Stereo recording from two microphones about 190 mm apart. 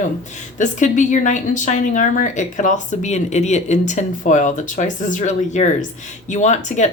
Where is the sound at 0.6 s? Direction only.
40° left (ahead or behind).